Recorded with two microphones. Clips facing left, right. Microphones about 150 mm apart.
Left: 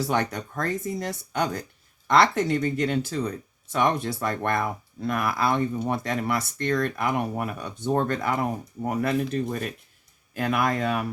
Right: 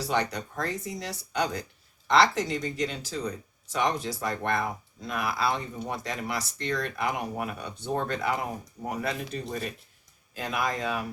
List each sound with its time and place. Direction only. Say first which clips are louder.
0.0 s speech: left 3 dB; 50° left (ahead or behind)